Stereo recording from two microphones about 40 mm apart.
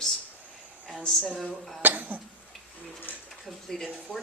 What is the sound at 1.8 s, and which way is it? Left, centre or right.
Speech, right.